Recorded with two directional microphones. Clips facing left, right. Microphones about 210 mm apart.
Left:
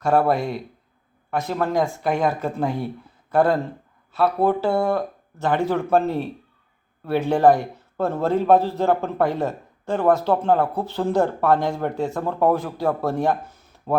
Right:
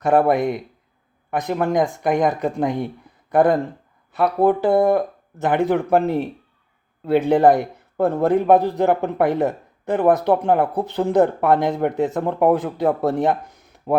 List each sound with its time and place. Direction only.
0.0 s speech: 20° right (ahead or behind)